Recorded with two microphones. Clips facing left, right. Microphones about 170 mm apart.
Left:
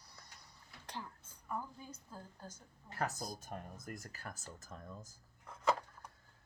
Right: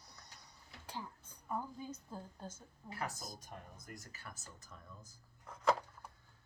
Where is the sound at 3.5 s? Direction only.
55° left (ahead or behind).